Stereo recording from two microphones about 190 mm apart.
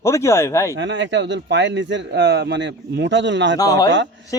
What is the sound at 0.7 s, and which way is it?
Speech, 70° right (ahead or behind).